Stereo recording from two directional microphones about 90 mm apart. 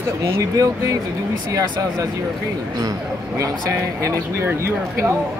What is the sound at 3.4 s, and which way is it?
Speech, 35° right (ahead or behind).